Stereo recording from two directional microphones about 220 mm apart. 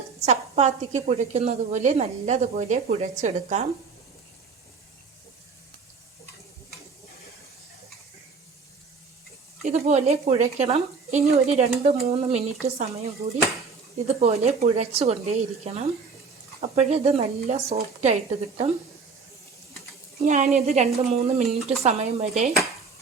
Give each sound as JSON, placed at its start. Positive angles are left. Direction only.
{"t": 0.2, "sound": "a woman's voice", "side_deg": -30}
{"t": 9.6, "sound": "speech", "side_deg": -30}
{"t": 14.1, "sound": "speech", "side_deg": -30}
{"t": 20.1, "sound": "a woman's voice", "side_deg": -30}